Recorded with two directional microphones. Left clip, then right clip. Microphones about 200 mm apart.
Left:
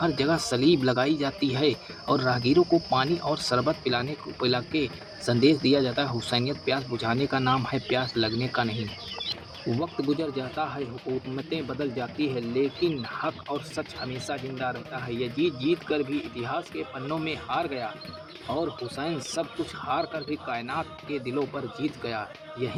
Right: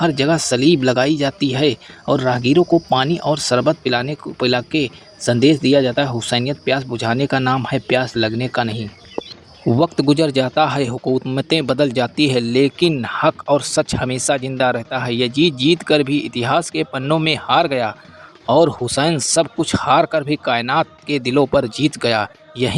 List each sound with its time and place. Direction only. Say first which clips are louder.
0.0 s speech: right 9 dB; 40° right (ahead or behind)
9.8 s speech: right 14 dB; 50° right (ahead or behind)